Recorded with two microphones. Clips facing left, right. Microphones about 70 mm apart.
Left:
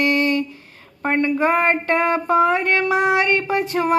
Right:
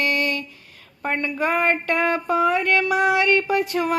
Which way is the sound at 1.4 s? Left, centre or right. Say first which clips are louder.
Left 3 dB; left.